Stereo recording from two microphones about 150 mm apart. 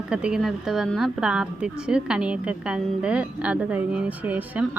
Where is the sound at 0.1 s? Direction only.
5° right (ahead or behind).